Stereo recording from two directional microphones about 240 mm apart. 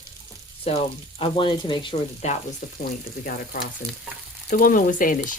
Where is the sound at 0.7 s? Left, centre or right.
Left.